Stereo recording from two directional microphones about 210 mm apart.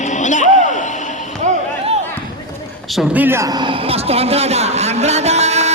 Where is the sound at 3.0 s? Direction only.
10° right (ahead or behind).